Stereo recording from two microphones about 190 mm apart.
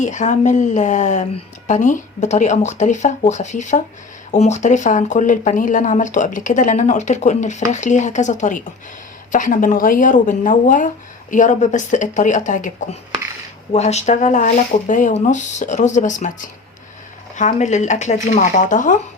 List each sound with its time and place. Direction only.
0.0 s speech: 40° left (ahead or behind)